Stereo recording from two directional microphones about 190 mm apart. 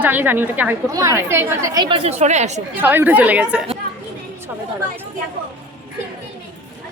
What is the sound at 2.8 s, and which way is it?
Speech, 10° right (ahead or behind).